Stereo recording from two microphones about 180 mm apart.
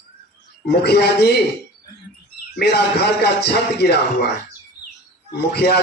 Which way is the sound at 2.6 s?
70° left (ahead or behind).